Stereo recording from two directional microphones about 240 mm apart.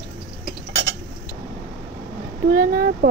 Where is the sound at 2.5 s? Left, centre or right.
Right.